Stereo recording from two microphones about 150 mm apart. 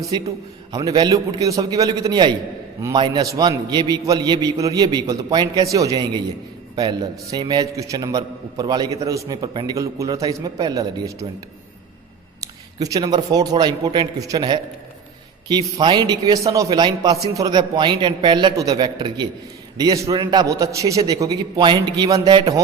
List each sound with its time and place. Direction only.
0.3 s a man's voice: 25° right (ahead or behind)
12.4 s a man's voice: 25° right (ahead or behind)